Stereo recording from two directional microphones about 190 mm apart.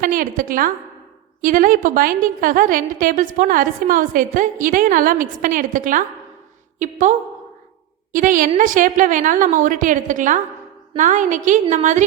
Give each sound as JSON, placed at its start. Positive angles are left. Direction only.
{"t": 0.0, "sound": "a woman's voice", "side_deg": -45}